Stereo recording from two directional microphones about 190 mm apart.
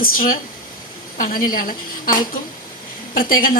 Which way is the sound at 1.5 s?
45° left (ahead or behind).